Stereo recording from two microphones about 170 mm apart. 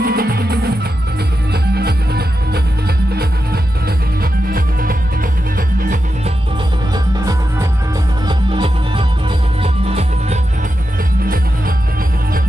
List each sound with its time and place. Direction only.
0.0 s music: 65° right (ahead or behind)
4.2 s music: 60° right (ahead or behind)
8.3 s music: 30° right (ahead or behind)